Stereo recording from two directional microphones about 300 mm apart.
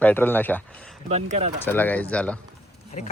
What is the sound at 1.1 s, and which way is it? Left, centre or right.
Speech, right.